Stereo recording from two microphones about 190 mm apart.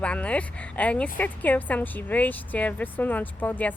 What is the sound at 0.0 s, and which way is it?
Speech, 5° left (ahead or behind).